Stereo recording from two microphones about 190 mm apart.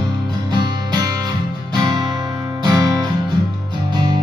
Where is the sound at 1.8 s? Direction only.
20° right (ahead or behind).